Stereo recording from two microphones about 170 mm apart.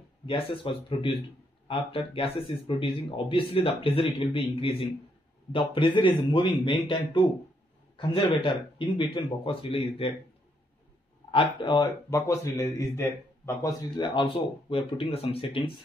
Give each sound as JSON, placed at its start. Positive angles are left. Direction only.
{"t": 0.3, "sound": "a man's voice", "side_deg": 35}
{"t": 11.3, "sound": "a man's voice", "side_deg": 25}